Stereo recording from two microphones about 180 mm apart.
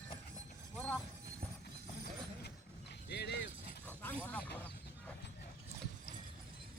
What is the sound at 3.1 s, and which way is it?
Dog, 70° left (ahead or behind).